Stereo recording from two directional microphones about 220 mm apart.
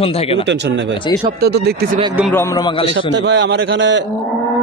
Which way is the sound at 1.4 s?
45° right (ahead or behind).